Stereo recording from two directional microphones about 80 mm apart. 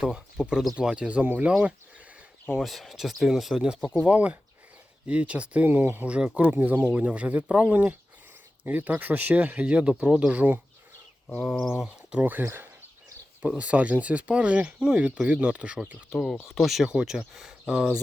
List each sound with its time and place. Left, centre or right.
0.0 s speech: centre
2.6 s speech: centre
12.2 s speech: right
16.1 s speech: centre